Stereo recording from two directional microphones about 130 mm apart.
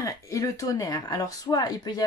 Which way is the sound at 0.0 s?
25° left (ahead or behind).